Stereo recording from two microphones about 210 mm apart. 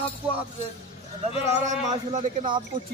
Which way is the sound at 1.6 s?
35° right (ahead or behind).